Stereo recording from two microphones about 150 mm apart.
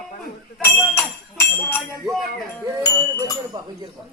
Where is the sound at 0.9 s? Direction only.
15° left (ahead or behind).